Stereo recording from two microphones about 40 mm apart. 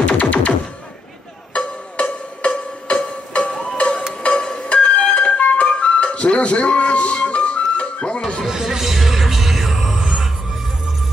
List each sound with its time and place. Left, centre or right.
0.0 s music: left
1.5 s music: left
3.5 s a sound: left
4.6 s flute: left
8.5 s music: centre